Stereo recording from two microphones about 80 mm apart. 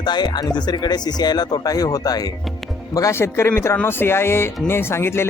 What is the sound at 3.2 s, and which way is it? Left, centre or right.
Speech, left.